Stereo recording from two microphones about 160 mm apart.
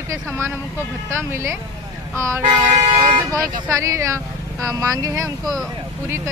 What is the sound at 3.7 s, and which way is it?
Speech, 20° right (ahead or behind).